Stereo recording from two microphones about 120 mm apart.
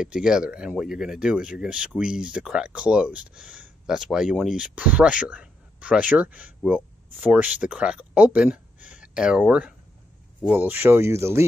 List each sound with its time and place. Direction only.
0.0 s speech: 5° right (ahead or behind); by 11.4 s 20° right (ahead or behind)